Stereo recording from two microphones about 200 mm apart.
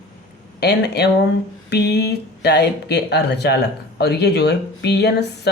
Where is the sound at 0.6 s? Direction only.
55° left (ahead or behind).